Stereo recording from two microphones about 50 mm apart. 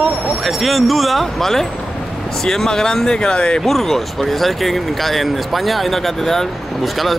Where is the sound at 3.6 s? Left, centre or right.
Centre.